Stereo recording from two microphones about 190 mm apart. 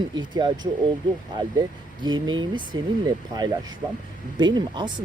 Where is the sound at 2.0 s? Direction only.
25° right (ahead or behind).